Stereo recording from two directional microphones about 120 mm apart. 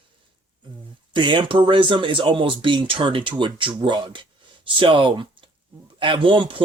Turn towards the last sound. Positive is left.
turn(degrees=-45)  # may be behind; listen again after turning